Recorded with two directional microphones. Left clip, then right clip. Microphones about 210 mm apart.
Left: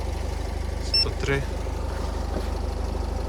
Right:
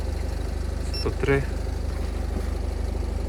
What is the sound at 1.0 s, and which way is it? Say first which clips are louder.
Vehicle: right 3 dB; 10° left (ahead or behind).